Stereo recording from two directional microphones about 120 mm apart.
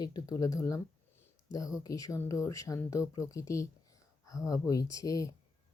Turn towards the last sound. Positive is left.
turn(degrees=30)  # may be behind; listen again after turning